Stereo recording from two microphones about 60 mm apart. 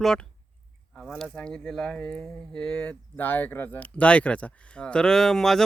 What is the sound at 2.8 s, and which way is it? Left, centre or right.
Speech, left.